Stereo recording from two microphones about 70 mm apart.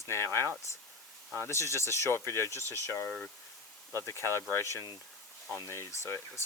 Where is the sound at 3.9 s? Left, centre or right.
Left.